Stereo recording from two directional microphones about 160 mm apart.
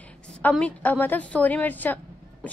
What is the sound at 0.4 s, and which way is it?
A woman's voice, 10° left (ahead or behind).